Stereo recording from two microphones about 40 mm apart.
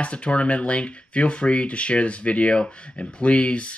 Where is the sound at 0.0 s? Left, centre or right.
Left.